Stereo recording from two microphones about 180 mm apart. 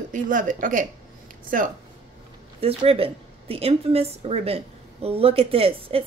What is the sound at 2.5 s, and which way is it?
A woman's voice, 35° right (ahead or behind).